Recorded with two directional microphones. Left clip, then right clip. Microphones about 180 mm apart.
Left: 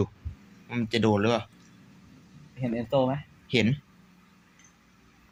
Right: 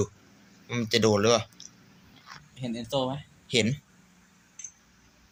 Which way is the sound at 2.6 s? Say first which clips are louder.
Left 4 dB; 20° left (ahead or behind).